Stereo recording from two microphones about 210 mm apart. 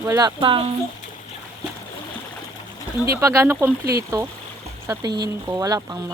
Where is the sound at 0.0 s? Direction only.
15° right (ahead or behind).